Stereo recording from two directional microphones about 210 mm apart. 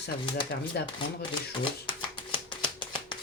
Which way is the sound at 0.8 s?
55° left (ahead or behind).